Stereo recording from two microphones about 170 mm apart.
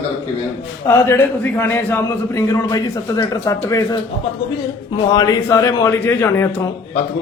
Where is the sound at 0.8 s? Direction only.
15° left (ahead or behind).